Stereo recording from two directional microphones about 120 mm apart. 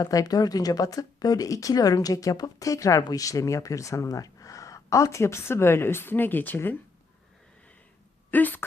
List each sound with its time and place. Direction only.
0.0 s speech: 30° left (ahead or behind); by 6.7 s 15° left (ahead or behind)
8.3 s speech: 15° left (ahead or behind)